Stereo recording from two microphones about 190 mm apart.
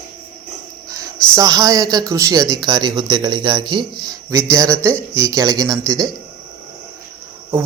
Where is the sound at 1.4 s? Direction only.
20° right (ahead or behind).